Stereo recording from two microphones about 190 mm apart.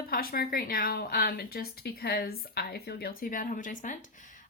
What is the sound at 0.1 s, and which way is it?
A woman's voice, 50° left (ahead or behind).